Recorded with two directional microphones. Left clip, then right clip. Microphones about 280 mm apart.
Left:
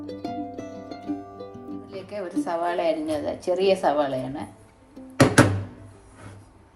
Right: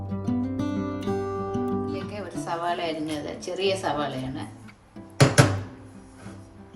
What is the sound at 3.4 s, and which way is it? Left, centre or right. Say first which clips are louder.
Speech: left 5 dB; centre.